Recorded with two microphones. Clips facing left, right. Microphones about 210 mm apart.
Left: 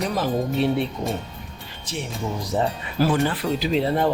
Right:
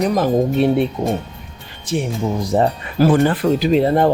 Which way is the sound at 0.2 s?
55° right (ahead or behind).